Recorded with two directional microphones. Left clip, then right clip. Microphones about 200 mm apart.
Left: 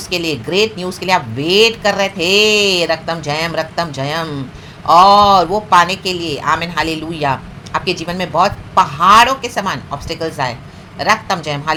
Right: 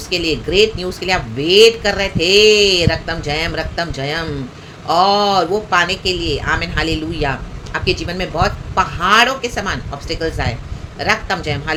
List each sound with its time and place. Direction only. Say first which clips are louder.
0.1 s speech: right 1 dB; 15° left (ahead or behind)